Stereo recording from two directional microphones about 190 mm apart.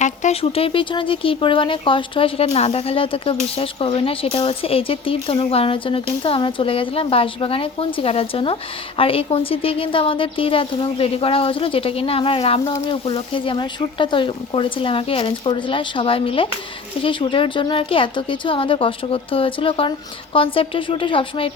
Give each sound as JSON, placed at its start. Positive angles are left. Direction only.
{"t": 0.0, "sound": "speech", "side_deg": 40}